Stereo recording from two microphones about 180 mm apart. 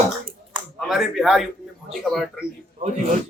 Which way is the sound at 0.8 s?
Centre (ahead or behind).